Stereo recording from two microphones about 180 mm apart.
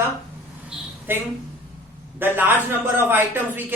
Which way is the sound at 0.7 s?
10° right (ahead or behind).